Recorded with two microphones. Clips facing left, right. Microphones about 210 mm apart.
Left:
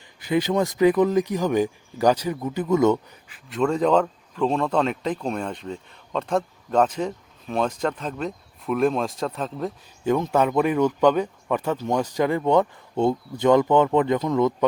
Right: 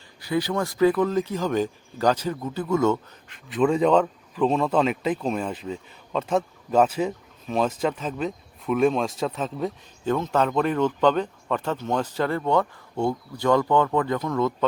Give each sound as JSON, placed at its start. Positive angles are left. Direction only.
{"t": 0.2, "sound": "speech", "side_deg": 20}
{"t": 3.3, "sound": "speech", "side_deg": 0}
{"t": 10.0, "sound": "speech", "side_deg": 10}